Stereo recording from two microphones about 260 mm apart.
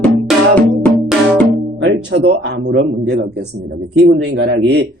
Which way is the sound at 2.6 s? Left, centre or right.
Right.